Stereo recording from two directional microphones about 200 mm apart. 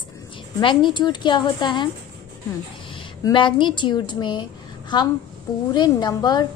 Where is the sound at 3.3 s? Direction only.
25° left (ahead or behind).